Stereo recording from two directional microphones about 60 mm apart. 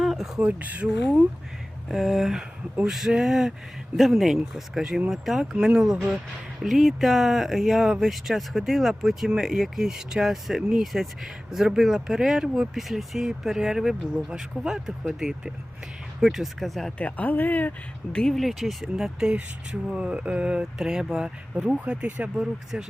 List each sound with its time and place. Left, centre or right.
0.0 s a sound: centre
0.3 s speech: right
0.9 s speech: centre
17.0 s speech: left
18.1 s speech: centre
18.4 s speech: centre
21.8 s speech: right